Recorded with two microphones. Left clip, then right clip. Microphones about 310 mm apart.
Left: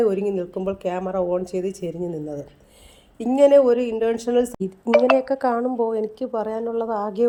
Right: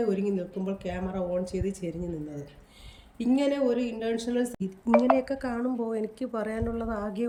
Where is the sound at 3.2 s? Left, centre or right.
Centre.